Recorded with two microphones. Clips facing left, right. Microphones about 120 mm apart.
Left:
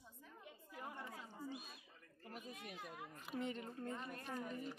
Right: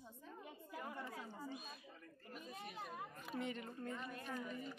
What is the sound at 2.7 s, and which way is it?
Speech, 45° right (ahead or behind).